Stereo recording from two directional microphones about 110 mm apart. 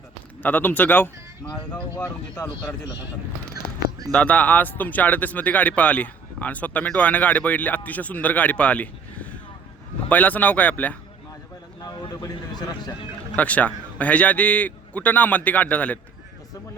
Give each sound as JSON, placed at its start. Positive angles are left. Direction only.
{"t": 0.4, "sound": "speech", "side_deg": 15}
{"t": 2.4, "sound": "speech", "side_deg": 35}
{"t": 4.1, "sound": "speech", "side_deg": 10}
{"t": 11.8, "sound": "a sound", "side_deg": 35}
{"t": 13.3, "sound": "speech", "side_deg": 15}